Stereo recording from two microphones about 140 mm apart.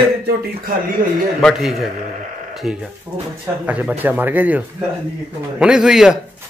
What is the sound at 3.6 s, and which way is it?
Speech, 10° right (ahead or behind).